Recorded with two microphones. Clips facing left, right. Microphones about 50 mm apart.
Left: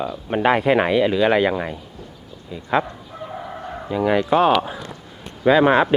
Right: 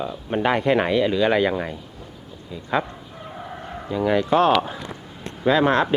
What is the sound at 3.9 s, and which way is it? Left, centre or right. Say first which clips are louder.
Speech: left 1 dB; centre.